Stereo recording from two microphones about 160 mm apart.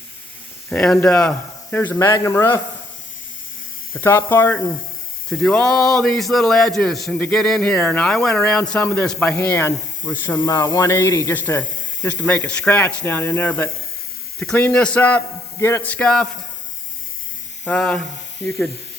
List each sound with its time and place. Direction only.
0.7 s a man's voice: 5° left (ahead or behind)
3.9 s a man's voice: 15° left (ahead or behind)
10.4 s a man's voice: 25° left (ahead or behind); by 16.3 s 5° left (ahead or behind)
17.7 s a man's voice: 5° left (ahead or behind)